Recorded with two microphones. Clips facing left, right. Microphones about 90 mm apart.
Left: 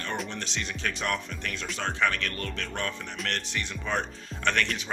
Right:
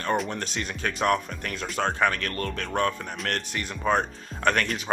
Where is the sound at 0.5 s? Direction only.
40° right (ahead or behind).